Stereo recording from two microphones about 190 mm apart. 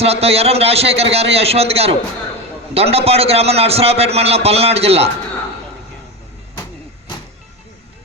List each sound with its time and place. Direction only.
0.0 s a man's voice: 30° right (ahead or behind)